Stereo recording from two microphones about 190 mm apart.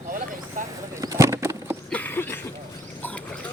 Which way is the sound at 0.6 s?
40° right (ahead or behind).